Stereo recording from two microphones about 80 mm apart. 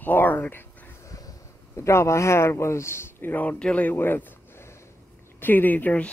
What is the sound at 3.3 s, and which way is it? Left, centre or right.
Speech, centre.